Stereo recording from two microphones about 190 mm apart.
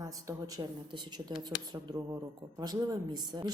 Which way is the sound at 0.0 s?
20° right (ahead or behind).